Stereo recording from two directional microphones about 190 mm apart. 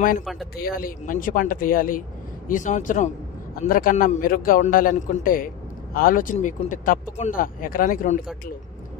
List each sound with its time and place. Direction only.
0.2 s a man's voice: centre (ahead or behind)
0.6 s speech: 50° left (ahead or behind)